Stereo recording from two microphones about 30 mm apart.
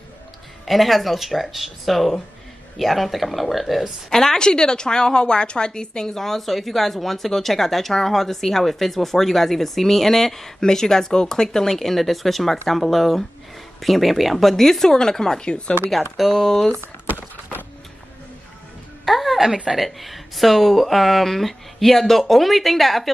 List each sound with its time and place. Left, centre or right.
0.7 s speech: centre
4.1 s speech: centre
4.4 s a woman's voice: left
6.1 s speech: centre
15.4 s speech: left
16.2 s speech: centre
19.0 s a sound: centre
19.8 s speech: centre
21.9 s speech: centre
22.3 s speech: centre